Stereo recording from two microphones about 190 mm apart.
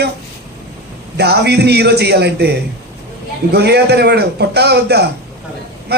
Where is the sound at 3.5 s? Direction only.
60° right (ahead or behind).